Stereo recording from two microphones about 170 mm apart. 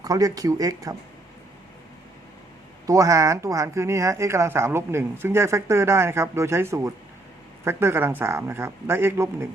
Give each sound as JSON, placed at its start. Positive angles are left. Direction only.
{"t": 0.0, "sound": "speech", "side_deg": -20}
{"t": 2.8, "sound": "speech", "side_deg": -20}